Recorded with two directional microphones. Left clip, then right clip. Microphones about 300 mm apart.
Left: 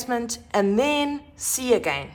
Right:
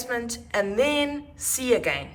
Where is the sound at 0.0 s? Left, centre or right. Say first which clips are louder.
Left 2 dB; centre.